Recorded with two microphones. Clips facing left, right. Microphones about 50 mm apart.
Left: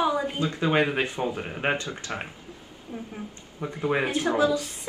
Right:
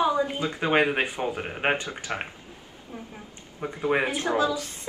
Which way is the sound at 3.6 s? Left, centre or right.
Centre.